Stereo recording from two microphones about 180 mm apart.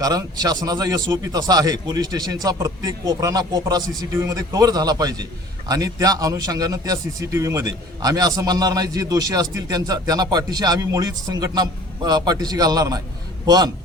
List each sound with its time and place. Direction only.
0.0 s a man's voice: 20° right (ahead or behind)